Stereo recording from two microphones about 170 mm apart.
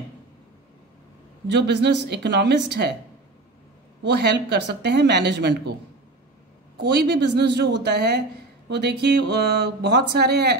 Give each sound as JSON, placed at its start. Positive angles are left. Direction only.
{"t": 1.5, "sound": "a woman's voice", "side_deg": -90}
{"t": 4.0, "sound": "speech", "side_deg": -85}
{"t": 6.8, "sound": "a woman's voice", "side_deg": -90}